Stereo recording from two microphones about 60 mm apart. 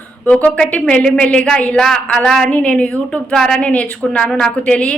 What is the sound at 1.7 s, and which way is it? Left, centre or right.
Speech, centre.